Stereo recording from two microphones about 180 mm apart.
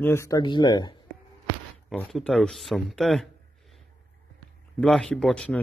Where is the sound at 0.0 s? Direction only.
15° left (ahead or behind).